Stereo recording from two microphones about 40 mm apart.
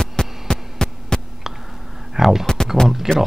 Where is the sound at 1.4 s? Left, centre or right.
Centre.